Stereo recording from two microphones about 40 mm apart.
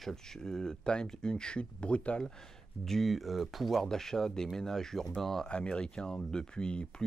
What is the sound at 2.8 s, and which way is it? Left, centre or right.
Speech, centre.